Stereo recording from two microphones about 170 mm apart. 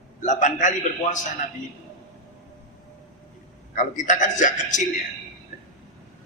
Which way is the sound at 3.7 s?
50° left (ahead or behind).